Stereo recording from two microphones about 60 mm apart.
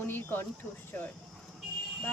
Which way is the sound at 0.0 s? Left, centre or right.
Left.